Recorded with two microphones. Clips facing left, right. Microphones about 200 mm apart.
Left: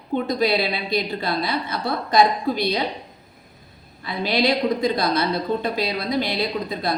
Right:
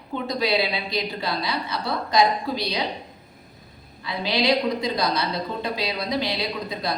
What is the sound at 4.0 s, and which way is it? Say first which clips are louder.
A woman's voice: left 3 dB; 50° left (ahead or behind).